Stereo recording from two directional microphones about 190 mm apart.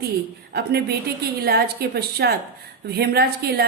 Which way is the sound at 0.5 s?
55° right (ahead or behind).